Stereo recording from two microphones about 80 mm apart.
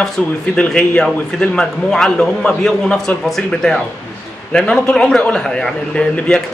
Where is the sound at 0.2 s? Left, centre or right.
Centre.